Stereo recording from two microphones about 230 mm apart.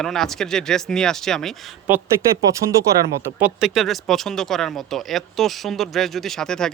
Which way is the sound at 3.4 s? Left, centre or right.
Centre.